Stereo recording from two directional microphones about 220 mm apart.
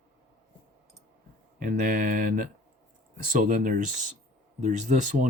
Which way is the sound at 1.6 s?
40° right (ahead or behind).